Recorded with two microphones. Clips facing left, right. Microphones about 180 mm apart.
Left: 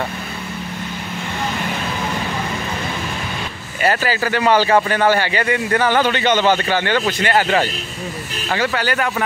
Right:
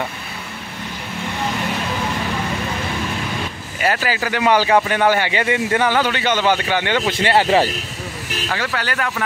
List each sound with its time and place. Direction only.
3.8 s a man's voice: 10° right (ahead or behind)
5.9 s a man's voice: 5° right (ahead or behind)
7.1 s speech: 25° right (ahead or behind)
8.5 s speech: 5° left (ahead or behind)